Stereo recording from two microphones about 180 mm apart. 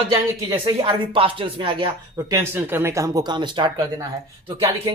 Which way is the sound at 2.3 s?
15° right (ahead or behind).